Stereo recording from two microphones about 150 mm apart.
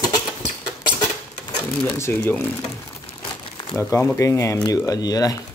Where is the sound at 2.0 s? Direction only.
20° left (ahead or behind).